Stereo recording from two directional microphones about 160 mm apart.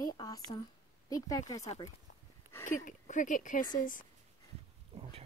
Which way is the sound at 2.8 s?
55° left (ahead or behind).